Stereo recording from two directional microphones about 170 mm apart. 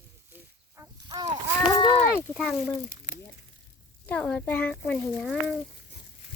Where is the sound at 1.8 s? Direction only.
25° left (ahead or behind).